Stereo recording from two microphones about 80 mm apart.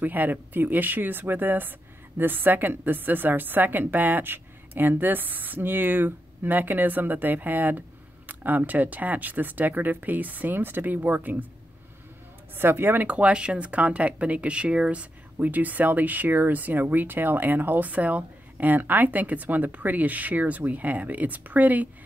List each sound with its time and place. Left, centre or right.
0.0 s speech: right
12.5 s speech: right